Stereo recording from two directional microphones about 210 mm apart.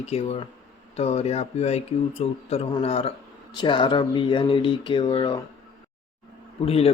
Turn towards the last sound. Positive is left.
turn(degrees=30)  # may be behind; listen again after turning